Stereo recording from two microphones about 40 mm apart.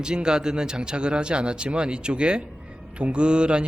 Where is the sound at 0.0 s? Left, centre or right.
Centre.